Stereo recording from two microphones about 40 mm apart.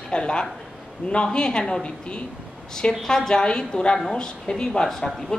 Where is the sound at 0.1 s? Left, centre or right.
Left.